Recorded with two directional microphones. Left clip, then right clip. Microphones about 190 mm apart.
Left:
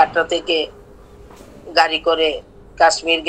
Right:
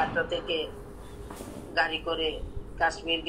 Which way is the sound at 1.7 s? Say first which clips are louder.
Left 13 dB; 65° left (ahead or behind).